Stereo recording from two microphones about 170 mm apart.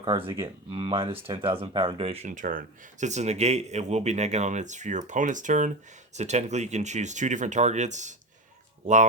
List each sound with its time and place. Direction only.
0.0 s speech: 30° right (ahead or behind)